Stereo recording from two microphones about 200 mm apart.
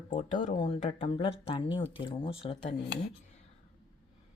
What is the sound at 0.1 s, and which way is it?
Speech, 40° left (ahead or behind).